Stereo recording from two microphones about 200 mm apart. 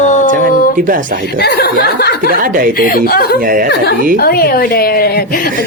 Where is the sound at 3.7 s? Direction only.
55° left (ahead or behind).